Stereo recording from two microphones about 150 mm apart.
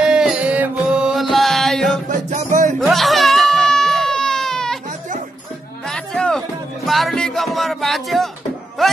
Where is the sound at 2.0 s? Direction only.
60° right (ahead or behind).